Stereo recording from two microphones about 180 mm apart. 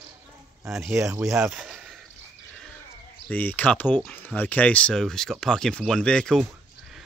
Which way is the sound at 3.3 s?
10° left (ahead or behind).